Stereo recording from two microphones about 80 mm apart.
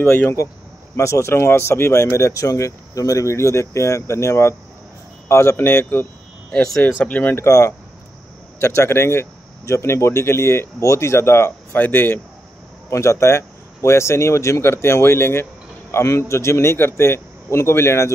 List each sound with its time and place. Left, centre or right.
0.0 s speech: left
0.9 s speech: left
6.5 s speech: centre
6.8 s speech: left
7.3 s speech: left
12.9 s speech: left